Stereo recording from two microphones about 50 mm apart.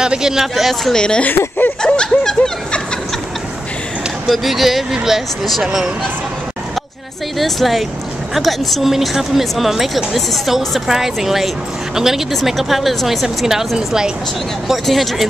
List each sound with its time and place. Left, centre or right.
0.0 s speech: centre
0.9 s a woman's voice: centre
1.8 s snicker: centre
4.3 s a woman's voice: centre
7.3 s a woman's voice: centre
14.7 s a woman's voice: centre